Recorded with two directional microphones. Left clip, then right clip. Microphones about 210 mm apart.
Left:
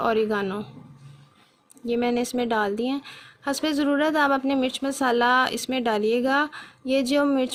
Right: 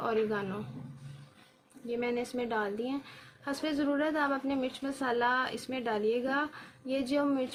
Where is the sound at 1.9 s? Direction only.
50° left (ahead or behind).